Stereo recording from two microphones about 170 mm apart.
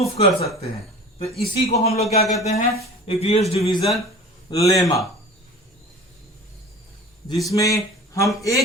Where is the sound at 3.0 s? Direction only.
35° left (ahead or behind).